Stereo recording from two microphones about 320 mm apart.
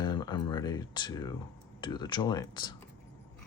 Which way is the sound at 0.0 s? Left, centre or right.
Centre.